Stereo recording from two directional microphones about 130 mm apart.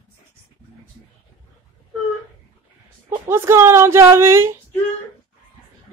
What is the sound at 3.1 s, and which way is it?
Speech, 20° right (ahead or behind).